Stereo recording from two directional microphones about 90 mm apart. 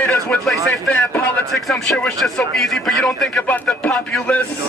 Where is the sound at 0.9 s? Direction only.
20° left (ahead or behind).